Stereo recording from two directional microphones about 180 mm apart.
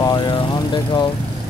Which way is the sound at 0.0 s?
25° left (ahead or behind).